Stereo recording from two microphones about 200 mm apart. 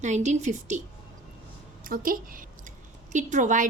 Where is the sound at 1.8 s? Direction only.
45° right (ahead or behind).